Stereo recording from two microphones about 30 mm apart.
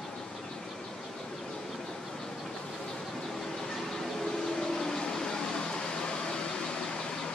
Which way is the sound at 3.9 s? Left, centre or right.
Centre.